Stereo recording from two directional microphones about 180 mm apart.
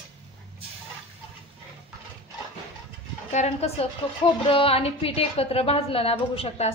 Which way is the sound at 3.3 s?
35° left (ahead or behind).